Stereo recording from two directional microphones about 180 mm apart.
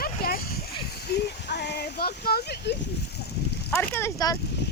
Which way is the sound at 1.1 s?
70° left (ahead or behind).